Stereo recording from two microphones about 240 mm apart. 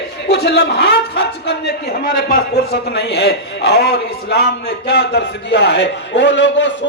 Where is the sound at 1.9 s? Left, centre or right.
Left.